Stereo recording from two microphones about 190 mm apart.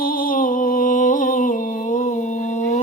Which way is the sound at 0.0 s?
50° left (ahead or behind).